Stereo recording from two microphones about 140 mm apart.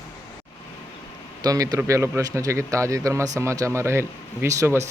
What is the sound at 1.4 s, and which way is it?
Speech, 25° right (ahead or behind).